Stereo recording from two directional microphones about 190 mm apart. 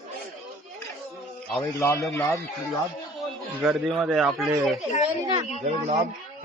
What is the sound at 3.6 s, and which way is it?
Speech, 5° right (ahead or behind).